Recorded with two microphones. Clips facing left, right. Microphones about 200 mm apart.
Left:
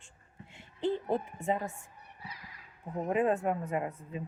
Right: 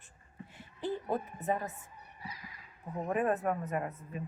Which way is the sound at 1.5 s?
25° left (ahead or behind).